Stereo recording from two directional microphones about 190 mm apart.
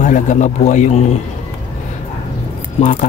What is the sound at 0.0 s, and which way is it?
Speech, 40° left (ahead or behind).